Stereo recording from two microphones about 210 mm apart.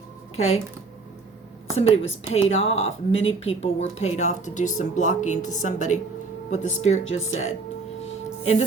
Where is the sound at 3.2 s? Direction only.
30° left (ahead or behind).